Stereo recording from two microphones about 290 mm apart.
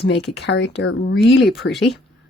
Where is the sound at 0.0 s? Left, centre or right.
Left.